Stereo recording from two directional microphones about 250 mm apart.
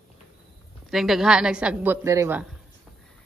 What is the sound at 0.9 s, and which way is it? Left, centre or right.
A woman's voice, centre.